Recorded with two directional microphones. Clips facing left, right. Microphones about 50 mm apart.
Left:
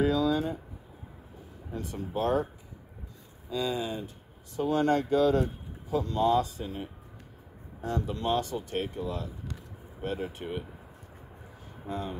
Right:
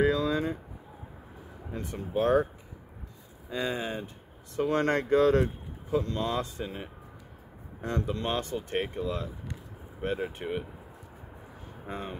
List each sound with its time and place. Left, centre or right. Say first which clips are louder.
0.0 s a sound: even; right
1.7 s speech: right 1 dB; right
3.4 s speech: left 1 dB; right
4.6 s speech: left 1 dB; right
11.9 s speech: left 2 dB; right